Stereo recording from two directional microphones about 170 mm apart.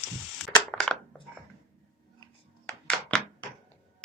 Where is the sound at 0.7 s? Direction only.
5° left (ahead or behind).